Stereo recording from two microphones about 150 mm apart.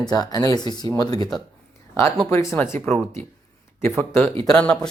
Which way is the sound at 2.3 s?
15° left (ahead or behind).